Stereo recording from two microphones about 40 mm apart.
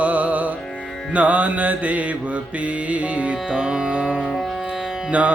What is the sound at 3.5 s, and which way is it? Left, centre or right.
Music, right.